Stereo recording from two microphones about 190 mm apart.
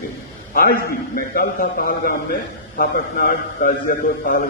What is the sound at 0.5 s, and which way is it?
A man's voice, 50° left (ahead or behind).